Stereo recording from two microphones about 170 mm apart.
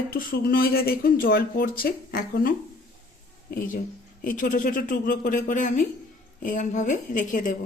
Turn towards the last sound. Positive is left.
turn(degrees=50)  # may be behind; listen again after turning